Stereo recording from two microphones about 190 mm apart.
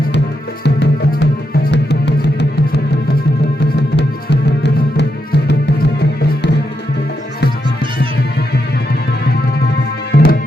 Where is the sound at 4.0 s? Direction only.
65° left (ahead or behind).